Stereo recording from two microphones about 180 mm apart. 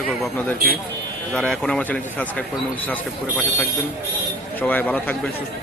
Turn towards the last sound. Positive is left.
turn(degrees=10)  # may be behind; listen again after turning